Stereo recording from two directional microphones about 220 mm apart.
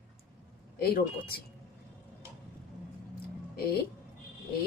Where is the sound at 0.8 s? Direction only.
45° left (ahead or behind).